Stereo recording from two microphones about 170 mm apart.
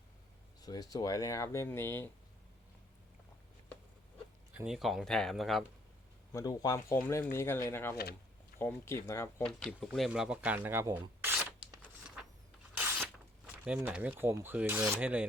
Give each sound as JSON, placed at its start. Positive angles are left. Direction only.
{"t": 0.6, "sound": "speech", "side_deg": 20}
{"t": 4.5, "sound": "speech", "side_deg": -5}
{"t": 6.3, "sound": "speech", "side_deg": 20}
{"t": 9.5, "sound": "speech", "side_deg": 0}
{"t": 11.8, "sound": "a sound", "side_deg": -5}
{"t": 13.7, "sound": "speech", "side_deg": -10}